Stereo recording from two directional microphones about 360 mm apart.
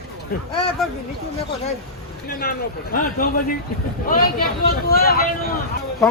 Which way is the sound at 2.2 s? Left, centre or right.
Left.